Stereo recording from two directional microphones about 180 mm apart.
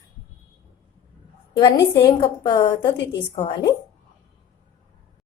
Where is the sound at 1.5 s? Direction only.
25° left (ahead or behind).